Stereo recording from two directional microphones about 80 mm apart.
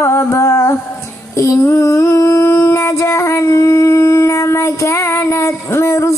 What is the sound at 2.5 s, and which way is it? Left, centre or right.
Howl, left.